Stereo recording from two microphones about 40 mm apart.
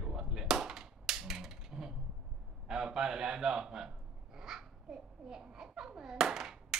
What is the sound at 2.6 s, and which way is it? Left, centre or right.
Speech, centre.